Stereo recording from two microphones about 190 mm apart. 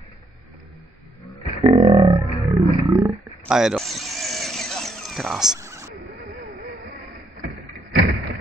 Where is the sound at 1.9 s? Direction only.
15° right (ahead or behind).